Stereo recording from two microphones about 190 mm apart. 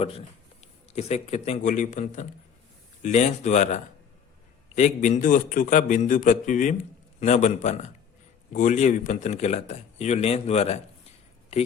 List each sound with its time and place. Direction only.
0.9 s a man's voice: 35° left (ahead or behind)